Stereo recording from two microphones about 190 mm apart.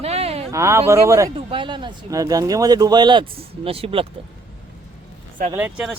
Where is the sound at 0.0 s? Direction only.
35° right (ahead or behind).